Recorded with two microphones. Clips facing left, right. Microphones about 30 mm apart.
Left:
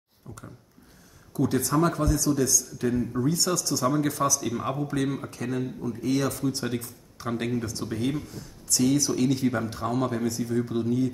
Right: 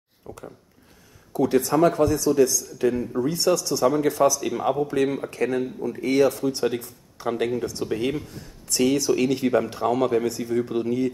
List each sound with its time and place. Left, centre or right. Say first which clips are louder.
0.3 s speech: right 5 dB; right
5.3 s speech: right 6 dB; right
6.3 s speech: right 4 dB; centre
8.6 s speech: right 3 dB; right